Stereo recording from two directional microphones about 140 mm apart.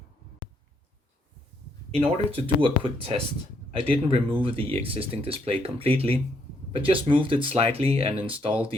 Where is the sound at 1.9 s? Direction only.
45° right (ahead or behind).